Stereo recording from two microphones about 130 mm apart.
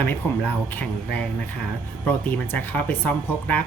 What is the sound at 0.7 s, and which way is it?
Speech, 15° left (ahead or behind).